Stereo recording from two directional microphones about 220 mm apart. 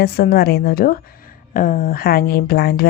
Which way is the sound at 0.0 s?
45° left (ahead or behind).